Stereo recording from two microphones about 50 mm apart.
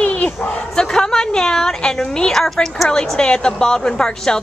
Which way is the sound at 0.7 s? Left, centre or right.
Centre.